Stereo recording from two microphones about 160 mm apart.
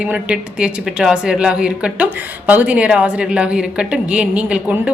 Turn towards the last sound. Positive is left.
turn(degrees=-5)  # may be behind; listen again after turning